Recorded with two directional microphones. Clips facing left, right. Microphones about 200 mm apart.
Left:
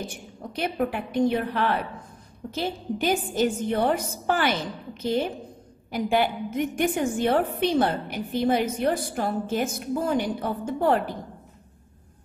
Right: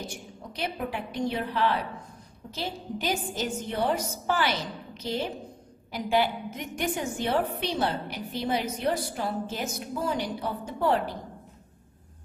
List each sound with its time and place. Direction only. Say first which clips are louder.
0.0 s a woman's voice: left 3 dB; 50° left (ahead or behind)